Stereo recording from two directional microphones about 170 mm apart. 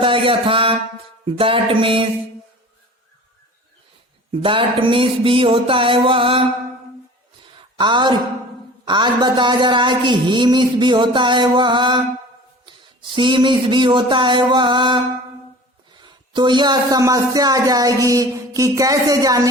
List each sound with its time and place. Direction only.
0.0 s speech: 30° right (ahead or behind)
4.3 s speech: 30° right (ahead or behind)
7.8 s speech: 25° right (ahead or behind)